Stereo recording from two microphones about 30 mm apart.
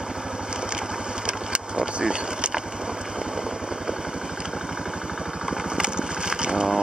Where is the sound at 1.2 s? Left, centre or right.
Right.